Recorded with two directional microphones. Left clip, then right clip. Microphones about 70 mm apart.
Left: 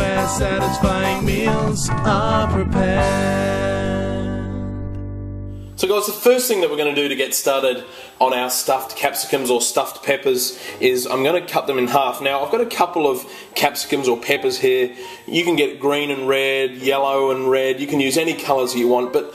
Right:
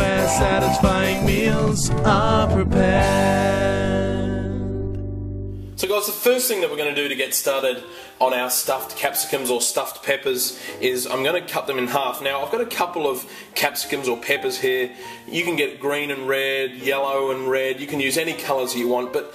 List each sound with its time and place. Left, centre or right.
0.0 s music: centre
5.8 s speech: left
8.6 s speech: left